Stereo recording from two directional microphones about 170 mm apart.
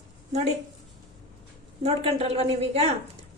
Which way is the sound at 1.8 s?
35° right (ahead or behind).